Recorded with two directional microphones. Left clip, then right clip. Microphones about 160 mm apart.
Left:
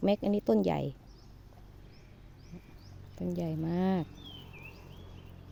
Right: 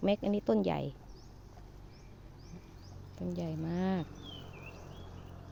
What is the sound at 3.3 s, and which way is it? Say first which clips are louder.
Speech: left 4 dB; 60° left (ahead or behind).